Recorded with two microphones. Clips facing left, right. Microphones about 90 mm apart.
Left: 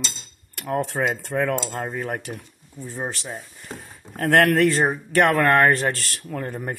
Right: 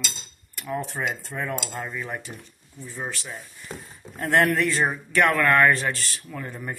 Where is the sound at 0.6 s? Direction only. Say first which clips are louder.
Left 5 dB; 70° left (ahead or behind).